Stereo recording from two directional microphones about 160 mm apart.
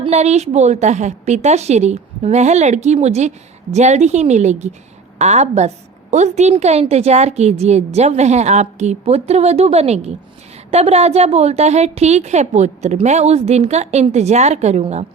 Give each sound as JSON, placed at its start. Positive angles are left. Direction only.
{"t": 0.0, "sound": "a woman's voice", "side_deg": -45}